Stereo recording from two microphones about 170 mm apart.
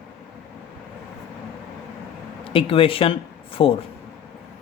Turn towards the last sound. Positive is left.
turn(degrees=35)  # may be behind; listen again after turning